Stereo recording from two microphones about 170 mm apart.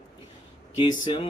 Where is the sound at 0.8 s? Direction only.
30° left (ahead or behind).